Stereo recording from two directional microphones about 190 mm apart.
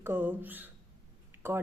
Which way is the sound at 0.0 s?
10° right (ahead or behind).